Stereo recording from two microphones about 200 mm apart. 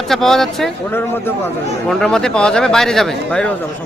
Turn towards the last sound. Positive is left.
turn(degrees=5)  # may be behind; listen again after turning